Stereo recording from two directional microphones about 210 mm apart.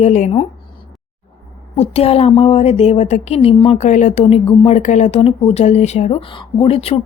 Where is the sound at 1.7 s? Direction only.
30° left (ahead or behind).